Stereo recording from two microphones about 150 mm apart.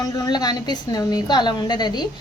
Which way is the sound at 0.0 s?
25° left (ahead or behind).